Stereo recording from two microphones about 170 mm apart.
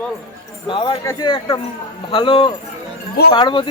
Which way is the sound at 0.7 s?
30° left (ahead or behind).